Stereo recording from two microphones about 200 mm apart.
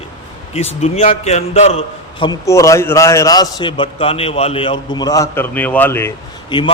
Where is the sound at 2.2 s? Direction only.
15° left (ahead or behind).